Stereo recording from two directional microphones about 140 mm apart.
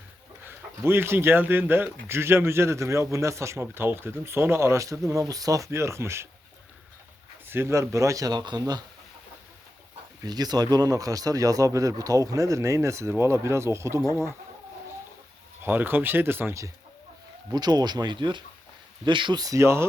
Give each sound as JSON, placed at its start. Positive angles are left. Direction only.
{"t": 0.4, "sound": "speech", "side_deg": -15}
{"t": 7.4, "sound": "speech", "side_deg": -15}
{"t": 10.2, "sound": "speech", "side_deg": -30}
{"t": 15.6, "sound": "speech", "side_deg": -15}